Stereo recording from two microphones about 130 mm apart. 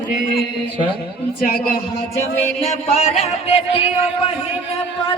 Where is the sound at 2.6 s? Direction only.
55° left (ahead or behind).